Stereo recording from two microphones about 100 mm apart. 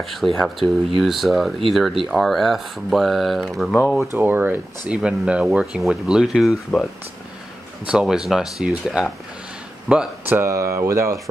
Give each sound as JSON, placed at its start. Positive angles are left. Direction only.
{"t": 0.0, "sound": "speech", "side_deg": 0}
{"t": 4.1, "sound": "speech", "side_deg": -20}
{"t": 7.8, "sound": "speech", "side_deg": -10}
{"t": 10.5, "sound": "speech", "side_deg": -30}